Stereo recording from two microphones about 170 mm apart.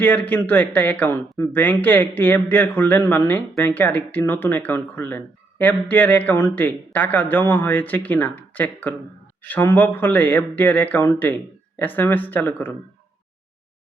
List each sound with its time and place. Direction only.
0.0 s speech: 10° left (ahead or behind)